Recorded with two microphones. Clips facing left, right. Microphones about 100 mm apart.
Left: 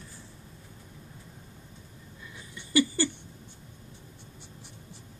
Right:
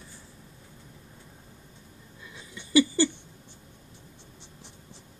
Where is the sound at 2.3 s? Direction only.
20° right (ahead or behind).